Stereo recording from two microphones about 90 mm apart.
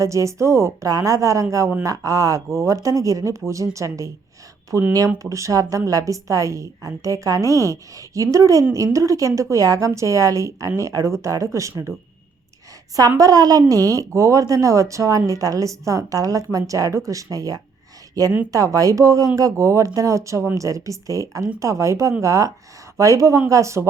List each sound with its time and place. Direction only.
0.0 s a woman's voice: 35° right (ahead or behind)
13.0 s a woman's voice: 40° right (ahead or behind)